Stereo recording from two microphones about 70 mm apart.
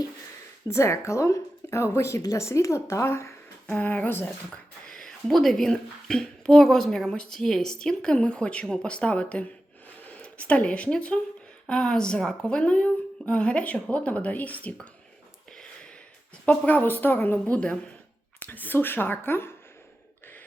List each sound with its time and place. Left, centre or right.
0.7 s a woman's voice: left
3.7 s a woman's voice: left
4.9 s a woman's voice: centre; by 14.7 s left
16.5 s a woman's voice: left